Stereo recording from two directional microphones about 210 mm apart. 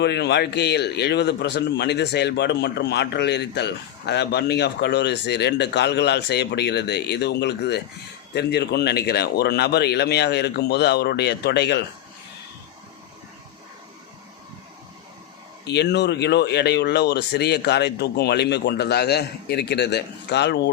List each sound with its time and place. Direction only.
0.0 s a man's voice: 55° left (ahead or behind)
15.6 s a man's voice: 55° left (ahead or behind)